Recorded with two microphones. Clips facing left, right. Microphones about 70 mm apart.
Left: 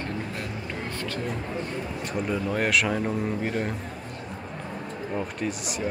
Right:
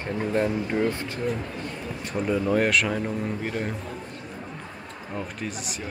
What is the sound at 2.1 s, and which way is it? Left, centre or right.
Speech, centre.